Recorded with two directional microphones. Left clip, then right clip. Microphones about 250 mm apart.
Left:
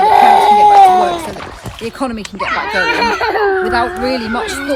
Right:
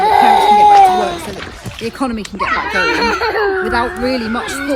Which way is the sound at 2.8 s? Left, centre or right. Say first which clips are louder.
Left 1 dB; left.